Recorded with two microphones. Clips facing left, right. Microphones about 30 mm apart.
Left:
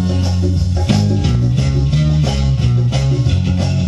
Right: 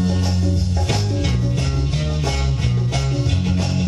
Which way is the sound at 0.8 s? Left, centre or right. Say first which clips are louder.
Left 8 dB; centre.